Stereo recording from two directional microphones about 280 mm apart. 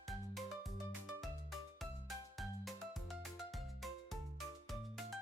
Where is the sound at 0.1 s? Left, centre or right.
Centre.